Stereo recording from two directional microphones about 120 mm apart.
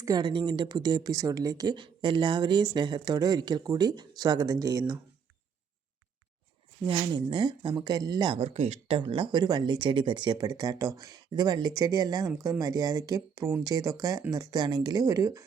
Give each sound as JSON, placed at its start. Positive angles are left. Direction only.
{"t": 0.0, "sound": "speech", "side_deg": -35}
{"t": 6.8, "sound": "speech", "side_deg": -40}